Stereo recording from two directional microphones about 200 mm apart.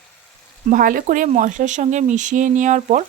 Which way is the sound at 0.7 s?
45° right (ahead or behind).